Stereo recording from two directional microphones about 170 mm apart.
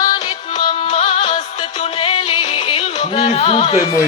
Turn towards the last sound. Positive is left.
turn(degrees=35)  # may be behind; listen again after turning